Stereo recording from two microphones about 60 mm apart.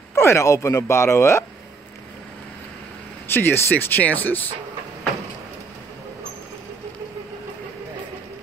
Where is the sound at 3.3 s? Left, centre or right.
Left.